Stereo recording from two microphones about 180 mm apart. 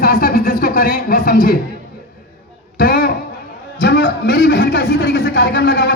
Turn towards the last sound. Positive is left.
turn(degrees=65)  # may be behind; listen again after turning